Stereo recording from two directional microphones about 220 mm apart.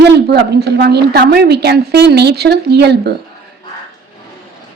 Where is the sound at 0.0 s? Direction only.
50° right (ahead or behind).